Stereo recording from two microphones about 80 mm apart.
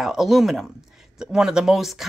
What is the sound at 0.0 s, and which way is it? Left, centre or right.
A woman's voice, centre.